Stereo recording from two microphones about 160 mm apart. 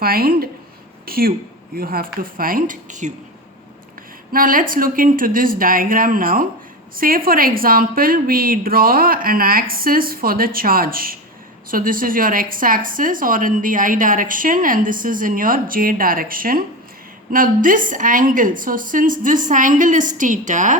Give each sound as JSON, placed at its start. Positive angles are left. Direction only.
{"t": 0.0, "sound": "a woman's voice", "side_deg": -70}
{"t": 4.3, "sound": "a woman's voice", "side_deg": -60}